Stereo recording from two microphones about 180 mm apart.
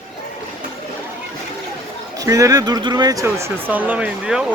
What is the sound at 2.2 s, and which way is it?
Speech, 20° right (ahead or behind).